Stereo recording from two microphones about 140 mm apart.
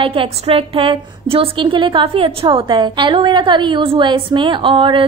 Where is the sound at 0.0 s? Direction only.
40° right (ahead or behind).